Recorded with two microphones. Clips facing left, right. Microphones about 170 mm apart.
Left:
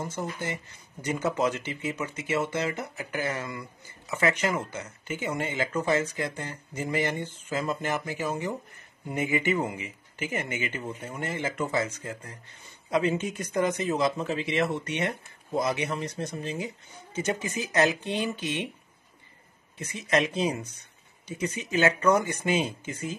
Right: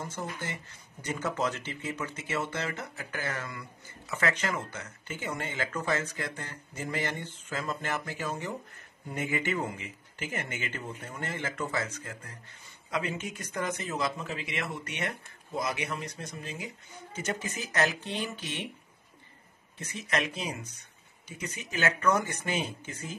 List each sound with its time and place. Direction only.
0.1 s speech: 15° left (ahead or behind)
19.9 s speech: 20° left (ahead or behind)